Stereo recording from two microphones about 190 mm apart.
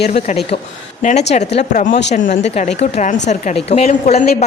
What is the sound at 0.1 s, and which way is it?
A woman's voice, 35° left (ahead or behind).